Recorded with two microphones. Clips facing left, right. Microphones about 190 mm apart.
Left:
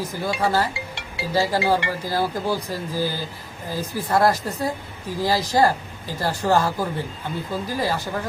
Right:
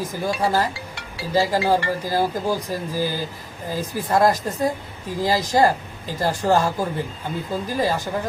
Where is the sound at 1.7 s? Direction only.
15° right (ahead or behind).